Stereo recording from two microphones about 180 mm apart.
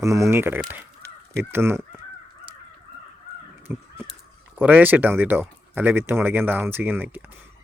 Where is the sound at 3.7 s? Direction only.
10° right (ahead or behind).